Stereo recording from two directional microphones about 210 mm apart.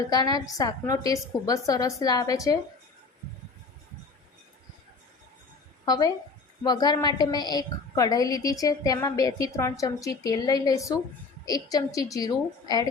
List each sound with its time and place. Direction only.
0.1 s a woman's voice: 20° left (ahead or behind)
5.8 s a woman's voice: 20° left (ahead or behind)